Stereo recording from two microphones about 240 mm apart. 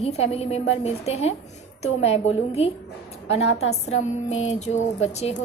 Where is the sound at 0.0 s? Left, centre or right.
Left.